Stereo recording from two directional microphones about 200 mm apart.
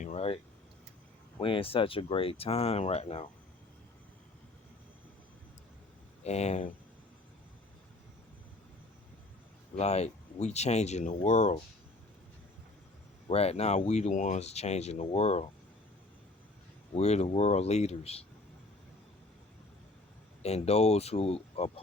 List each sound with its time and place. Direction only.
0.0 s a sound: 35° left (ahead or behind)
1.4 s speech: 25° left (ahead or behind)
6.2 s speech: 35° left (ahead or behind)
9.7 s speech: 30° left (ahead or behind)
13.2 s speech: 30° left (ahead or behind)
16.9 s speech: 30° left (ahead or behind)
20.4 s speech: 30° left (ahead or behind)